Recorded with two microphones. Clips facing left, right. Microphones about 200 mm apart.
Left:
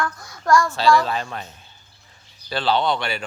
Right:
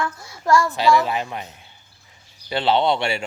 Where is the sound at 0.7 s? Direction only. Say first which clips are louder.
Even; 20° right (ahead or behind).